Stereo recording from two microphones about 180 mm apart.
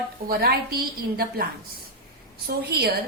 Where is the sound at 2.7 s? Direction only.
65° right (ahead or behind).